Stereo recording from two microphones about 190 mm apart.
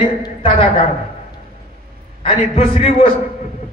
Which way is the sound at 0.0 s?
30° left (ahead or behind).